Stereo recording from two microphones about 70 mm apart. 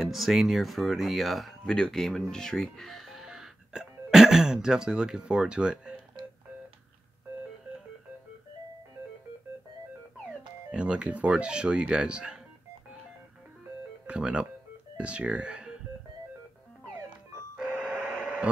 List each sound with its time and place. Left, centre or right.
0.0 s speech: centre
10.7 s speech: centre
14.0 s speech: centre
17.6 s doorbell: centre
17.9 s radio: centre